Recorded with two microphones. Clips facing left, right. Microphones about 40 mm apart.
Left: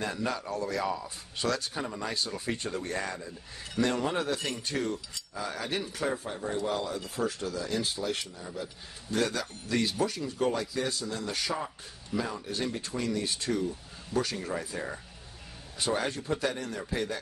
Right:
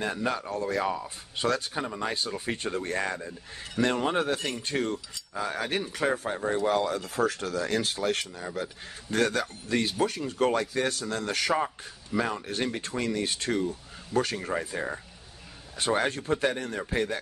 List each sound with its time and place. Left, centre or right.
0.0 s speech: right
6.7 s speech: right
9.1 s speech: right
9.4 s speech: right
10.4 s a man's voice: right
15.8 s speech: right